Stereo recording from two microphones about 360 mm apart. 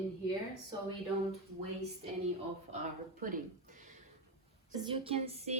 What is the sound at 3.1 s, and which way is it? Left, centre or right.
A woman's voice, right.